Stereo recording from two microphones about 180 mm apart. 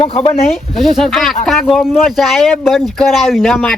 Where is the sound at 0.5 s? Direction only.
Centre (ahead or behind).